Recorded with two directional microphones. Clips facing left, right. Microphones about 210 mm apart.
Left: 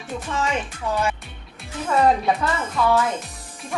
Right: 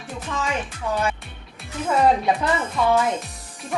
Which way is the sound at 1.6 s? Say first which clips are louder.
Even; centre (ahead or behind).